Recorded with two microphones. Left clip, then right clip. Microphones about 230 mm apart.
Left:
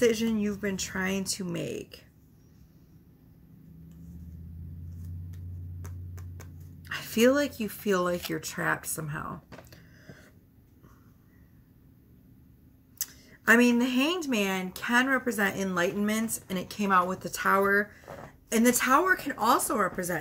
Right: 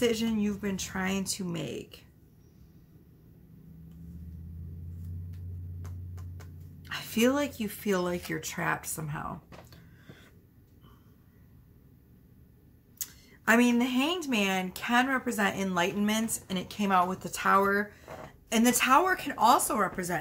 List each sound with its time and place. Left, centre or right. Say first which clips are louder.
0.2 s speech: left 2 dB; centre
5.3 s tick-tock: left 1 dB; left
6.9 s a woman's voice: left 4 dB; centre
9.3 s a sound: left 1 dB; centre
13.5 s speech: left 3 dB; centre